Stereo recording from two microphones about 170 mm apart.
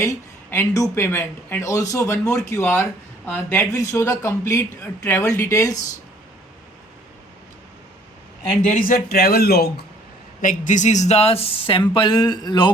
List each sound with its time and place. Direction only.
0.5 s speech: 15° left (ahead or behind)
8.6 s speech: 50° left (ahead or behind)
10.4 s speech: 50° left (ahead or behind); by 12.7 s 25° left (ahead or behind)